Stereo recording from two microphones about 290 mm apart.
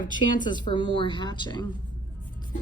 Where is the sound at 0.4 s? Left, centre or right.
Centre.